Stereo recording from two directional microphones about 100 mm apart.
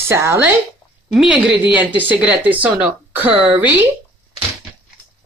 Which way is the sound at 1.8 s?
15° right (ahead or behind).